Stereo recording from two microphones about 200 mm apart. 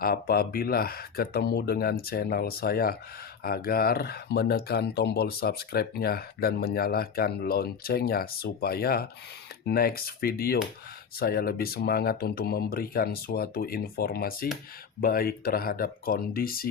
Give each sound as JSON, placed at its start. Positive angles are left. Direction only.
{"t": 0.0, "sound": "speech", "side_deg": 50}